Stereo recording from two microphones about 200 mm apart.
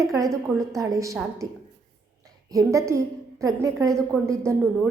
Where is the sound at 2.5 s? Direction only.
15° right (ahead or behind).